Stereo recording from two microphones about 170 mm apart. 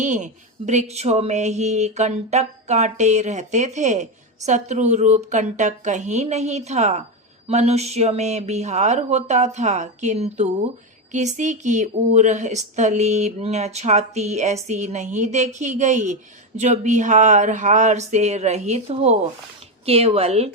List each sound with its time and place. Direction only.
0.0 s speech: 45° right (ahead or behind)